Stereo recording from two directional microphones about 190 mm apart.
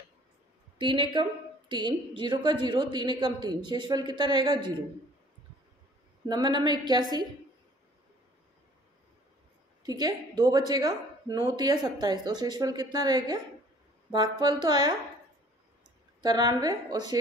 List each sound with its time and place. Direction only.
0.7 s a woman's voice: 25° right (ahead or behind)
6.2 s a woman's voice: 20° right (ahead or behind)
9.8 s a woman's voice: 20° right (ahead or behind)
16.2 s a woman's voice: 20° right (ahead or behind)